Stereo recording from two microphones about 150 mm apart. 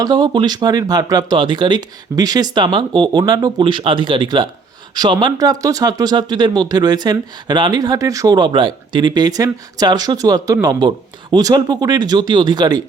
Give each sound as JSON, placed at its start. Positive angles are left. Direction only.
{"t": 0.0, "sound": "speech", "side_deg": -30}